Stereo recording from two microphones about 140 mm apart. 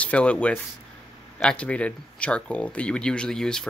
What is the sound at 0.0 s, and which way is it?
Speech, 10° left (ahead or behind).